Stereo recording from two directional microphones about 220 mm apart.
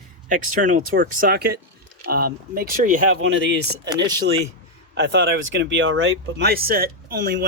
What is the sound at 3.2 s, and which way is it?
Speech, 55° right (ahead or behind).